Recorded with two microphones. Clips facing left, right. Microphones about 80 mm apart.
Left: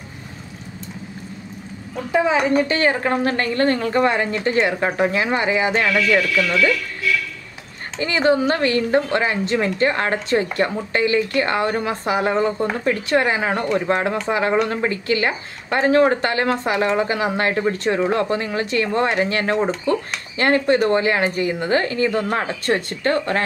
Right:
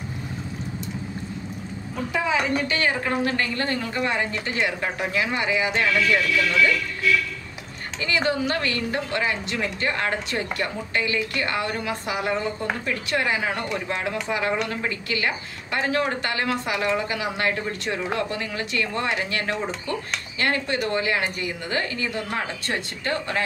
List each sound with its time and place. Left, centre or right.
2.1 s speech: left
8.0 s speech: left